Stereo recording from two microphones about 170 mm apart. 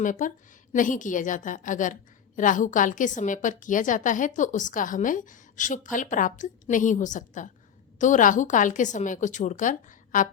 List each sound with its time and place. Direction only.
0.0 s a woman's voice: 50° left (ahead or behind)